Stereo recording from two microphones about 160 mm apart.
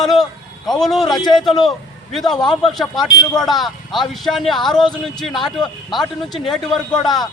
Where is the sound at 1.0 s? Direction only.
25° left (ahead or behind).